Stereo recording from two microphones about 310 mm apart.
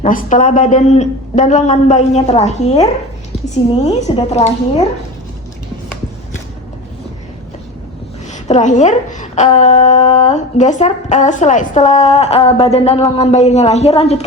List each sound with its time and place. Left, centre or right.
0.0 s speech: left
3.8 s speech: centre
8.4 s speech: left